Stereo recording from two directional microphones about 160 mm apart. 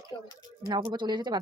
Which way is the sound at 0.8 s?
30° right (ahead or behind).